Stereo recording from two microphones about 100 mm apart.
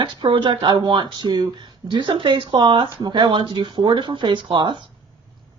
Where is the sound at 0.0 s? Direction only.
50° right (ahead or behind).